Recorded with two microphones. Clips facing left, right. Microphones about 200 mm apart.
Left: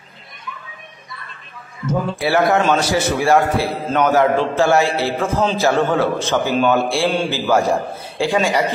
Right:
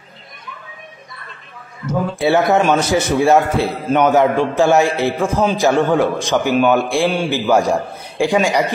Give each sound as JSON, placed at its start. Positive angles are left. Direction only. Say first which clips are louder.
{"t": 2.1, "sound": "a man's voice", "louder": "right 3 dB", "side_deg": -20}